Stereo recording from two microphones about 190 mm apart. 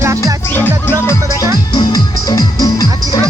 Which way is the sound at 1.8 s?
20° left (ahead or behind).